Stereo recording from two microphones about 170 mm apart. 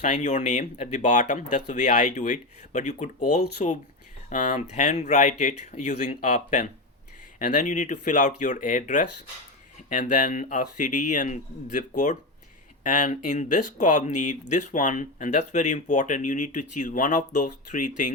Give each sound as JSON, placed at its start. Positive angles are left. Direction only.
{"t": 0.0, "sound": "speech", "side_deg": 45}